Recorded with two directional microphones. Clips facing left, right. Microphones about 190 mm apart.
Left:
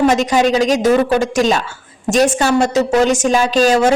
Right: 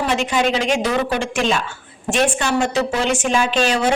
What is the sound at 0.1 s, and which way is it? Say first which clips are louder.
A woman's voice: left 5 dB; 40° left (ahead or behind).